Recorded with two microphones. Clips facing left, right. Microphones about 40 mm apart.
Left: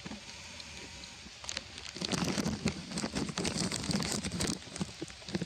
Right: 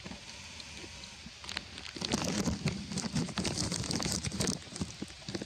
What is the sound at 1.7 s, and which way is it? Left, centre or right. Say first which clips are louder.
Rain on surface: right 1 dB; centre.